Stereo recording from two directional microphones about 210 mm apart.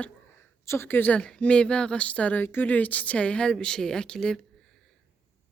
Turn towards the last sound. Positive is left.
turn(degrees=5)  # may be behind; listen again after turning